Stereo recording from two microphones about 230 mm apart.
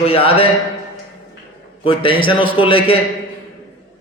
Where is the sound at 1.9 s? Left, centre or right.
Left.